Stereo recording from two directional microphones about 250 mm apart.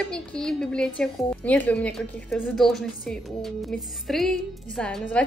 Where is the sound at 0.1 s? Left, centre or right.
Centre.